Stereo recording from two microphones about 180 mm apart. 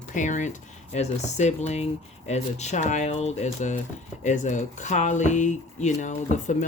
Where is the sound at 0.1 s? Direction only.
45° left (ahead or behind).